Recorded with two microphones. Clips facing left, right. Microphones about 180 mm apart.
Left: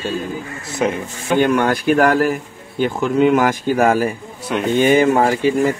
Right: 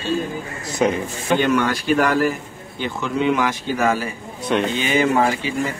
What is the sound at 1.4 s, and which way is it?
Speech, 50° left (ahead or behind).